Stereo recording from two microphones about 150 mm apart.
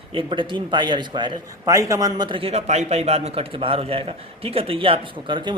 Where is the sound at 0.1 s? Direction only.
35° right (ahead or behind).